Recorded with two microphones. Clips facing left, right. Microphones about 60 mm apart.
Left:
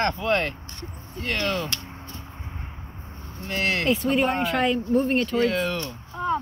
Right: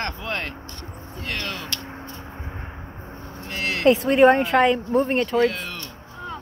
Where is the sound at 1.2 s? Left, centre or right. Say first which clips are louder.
Left 4 dB; centre.